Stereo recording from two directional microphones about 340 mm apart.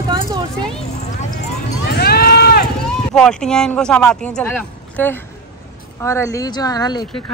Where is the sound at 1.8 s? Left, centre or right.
Left.